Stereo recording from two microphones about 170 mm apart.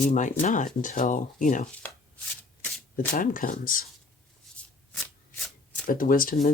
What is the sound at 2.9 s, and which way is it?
Speech, 50° left (ahead or behind).